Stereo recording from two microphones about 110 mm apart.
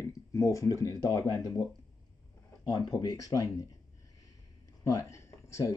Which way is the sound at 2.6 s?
35° left (ahead or behind).